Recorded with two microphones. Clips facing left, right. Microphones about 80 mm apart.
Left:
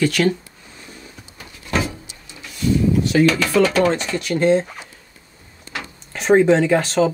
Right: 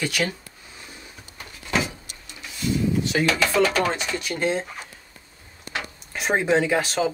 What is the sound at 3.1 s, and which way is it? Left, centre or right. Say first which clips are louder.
Speech: left 6 dB; right.